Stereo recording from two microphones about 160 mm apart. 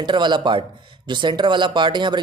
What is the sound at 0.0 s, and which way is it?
Speech, 30° right (ahead or behind).